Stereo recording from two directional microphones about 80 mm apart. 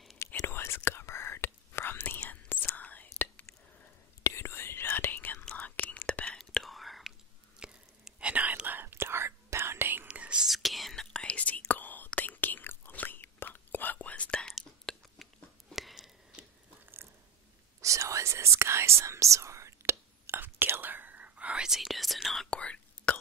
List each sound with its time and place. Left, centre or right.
0.5 s whispering: left
4.2 s whispering: left
6.3 s whispering: centre
7.6 s whispering: centre
10.0 s whispering: centre
10.4 s whispering: centre
14.9 s a sound: centre
15.7 s whispering: centre
17.7 s whispering: right; by 22.5 s centre
22.5 s whispering: centre